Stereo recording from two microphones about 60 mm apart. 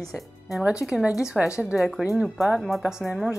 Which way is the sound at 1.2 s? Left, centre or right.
Centre.